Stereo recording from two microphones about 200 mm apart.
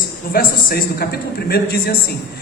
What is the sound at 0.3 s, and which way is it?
A man's voice, 50° left (ahead or behind).